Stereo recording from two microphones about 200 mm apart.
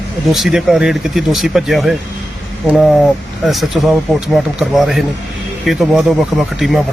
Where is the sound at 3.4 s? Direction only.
Centre (ahead or behind).